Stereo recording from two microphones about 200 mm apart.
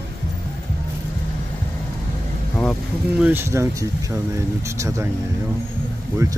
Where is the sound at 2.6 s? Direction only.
Centre (ahead or behind).